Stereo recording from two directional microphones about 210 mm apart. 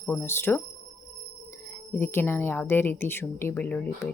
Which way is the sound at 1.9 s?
10° left (ahead or behind).